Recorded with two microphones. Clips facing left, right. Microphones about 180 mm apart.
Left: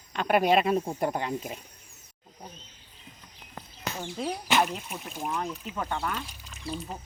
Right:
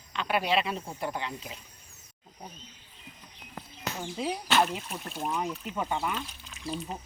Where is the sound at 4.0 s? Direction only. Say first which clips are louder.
Even; 5° right (ahead or behind).